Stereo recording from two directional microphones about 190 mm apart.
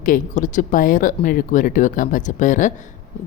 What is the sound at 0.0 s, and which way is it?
A woman's voice, 45° left (ahead or behind).